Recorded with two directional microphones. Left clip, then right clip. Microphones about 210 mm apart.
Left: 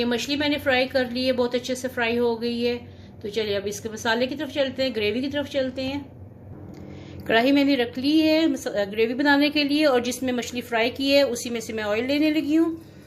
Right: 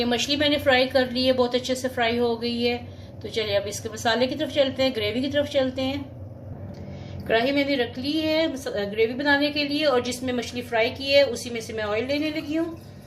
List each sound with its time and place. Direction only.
0.0 s a woman's voice: 20° left (ahead or behind)
7.3 s a woman's voice: 35° left (ahead or behind)